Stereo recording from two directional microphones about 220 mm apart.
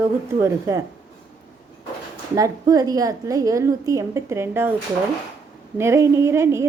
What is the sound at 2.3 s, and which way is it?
A woman's voice, 15° right (ahead or behind).